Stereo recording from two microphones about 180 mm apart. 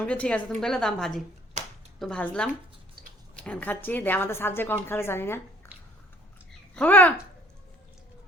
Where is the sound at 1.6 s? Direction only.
40° right (ahead or behind).